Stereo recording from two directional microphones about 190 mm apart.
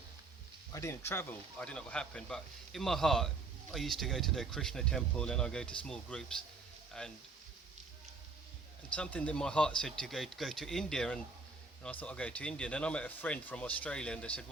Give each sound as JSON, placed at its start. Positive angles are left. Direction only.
{"t": 0.7, "sound": "a man's voice", "side_deg": 15}
{"t": 9.0, "sound": "a man's voice", "side_deg": 5}